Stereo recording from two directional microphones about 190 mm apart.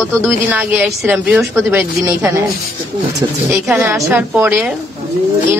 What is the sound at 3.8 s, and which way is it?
Speech, 10° right (ahead or behind).